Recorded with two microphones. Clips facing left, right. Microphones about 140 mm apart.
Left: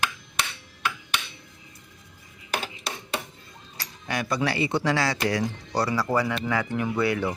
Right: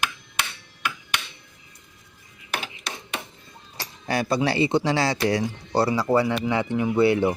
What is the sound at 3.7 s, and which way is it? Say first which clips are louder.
Speech: right 5 dB; 30° right (ahead or behind).